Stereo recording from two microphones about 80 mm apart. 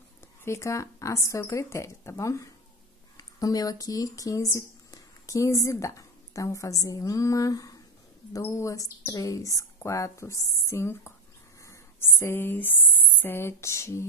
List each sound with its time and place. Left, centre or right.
0.5 s speech: left
3.2 s speech: left
8.3 s speech: left